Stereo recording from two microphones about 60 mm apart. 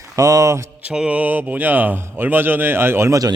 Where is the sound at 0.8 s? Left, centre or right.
Centre; by 3.1 s right.